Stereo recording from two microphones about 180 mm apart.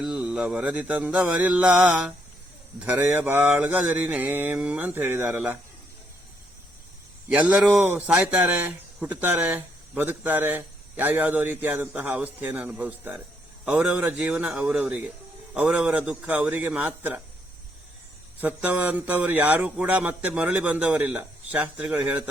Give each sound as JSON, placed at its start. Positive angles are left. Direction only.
{"t": 0.0, "sound": "speech", "side_deg": -5}
{"t": 7.3, "sound": "speech", "side_deg": -5}
{"t": 18.3, "sound": "speech", "side_deg": -10}